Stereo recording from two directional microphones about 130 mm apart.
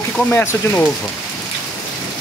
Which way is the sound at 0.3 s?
15° left (ahead or behind).